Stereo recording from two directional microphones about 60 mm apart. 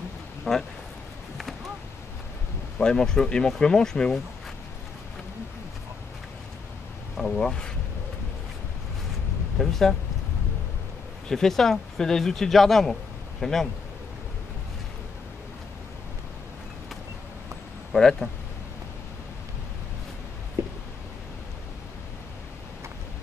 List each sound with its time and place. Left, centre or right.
0.5 s a man's voice: centre
2.8 s speech: centre
7.3 s speech: centre
9.6 s a man's voice: centre
11.2 s a man's voice: centre
17.9 s speech: centre
20.6 s a sound: right